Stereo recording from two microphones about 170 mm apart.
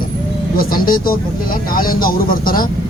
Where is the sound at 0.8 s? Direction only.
60° left (ahead or behind).